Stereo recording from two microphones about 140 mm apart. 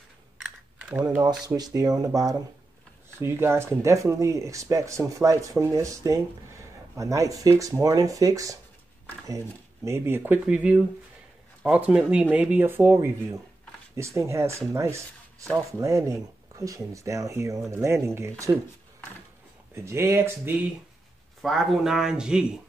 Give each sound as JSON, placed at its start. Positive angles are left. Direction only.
{"t": 0.4, "sound": "typing", "side_deg": -10}
{"t": 1.5, "sound": "speech", "side_deg": -25}
{"t": 9.8, "sound": "speech", "side_deg": -20}
{"t": 19.7, "sound": "speech", "side_deg": -20}
{"t": 21.4, "sound": "speech", "side_deg": 0}